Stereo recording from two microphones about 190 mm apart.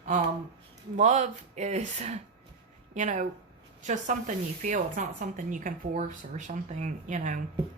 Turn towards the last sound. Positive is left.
turn(degrees=-40)  # may be behind; listen again after turning